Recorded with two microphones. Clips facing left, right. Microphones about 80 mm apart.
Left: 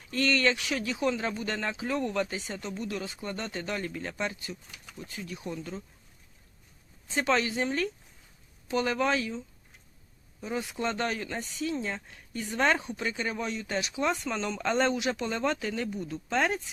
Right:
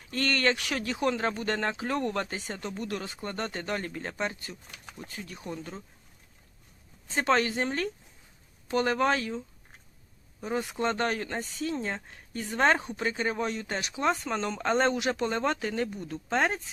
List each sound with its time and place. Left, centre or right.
0.1 s speech: right
7.2 s speech: right
10.4 s speech: right